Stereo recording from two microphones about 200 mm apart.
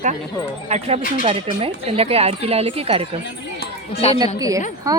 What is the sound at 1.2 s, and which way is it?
Speech, 25° right (ahead or behind).